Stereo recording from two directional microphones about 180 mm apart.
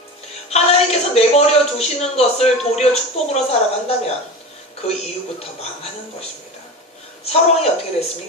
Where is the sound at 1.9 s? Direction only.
35° left (ahead or behind).